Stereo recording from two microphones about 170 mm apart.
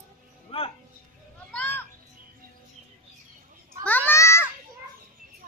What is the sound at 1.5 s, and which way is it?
Children playing, 10° left (ahead or behind).